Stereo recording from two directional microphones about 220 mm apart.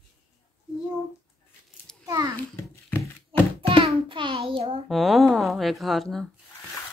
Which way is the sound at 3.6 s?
25° right (ahead or behind).